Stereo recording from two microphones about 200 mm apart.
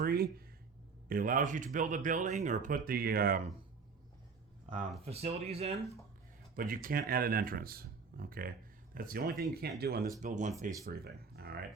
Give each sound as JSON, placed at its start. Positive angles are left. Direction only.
{"t": 0.0, "sound": "a sound", "side_deg": -50}
{"t": 1.0, "sound": "speech", "side_deg": -45}
{"t": 5.0, "sound": "speech", "side_deg": -30}
{"t": 6.6, "sound": "speech", "side_deg": -45}
{"t": 10.2, "sound": "speech", "side_deg": -40}
{"t": 10.8, "sound": "speech", "side_deg": -50}